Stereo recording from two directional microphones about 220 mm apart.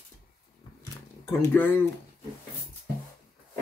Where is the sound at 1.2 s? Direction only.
10° left (ahead or behind).